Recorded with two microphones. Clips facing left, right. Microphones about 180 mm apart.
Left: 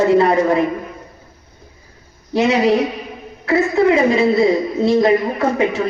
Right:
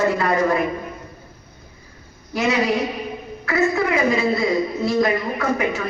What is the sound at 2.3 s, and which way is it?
A woman's voice, 30° left (ahead or behind).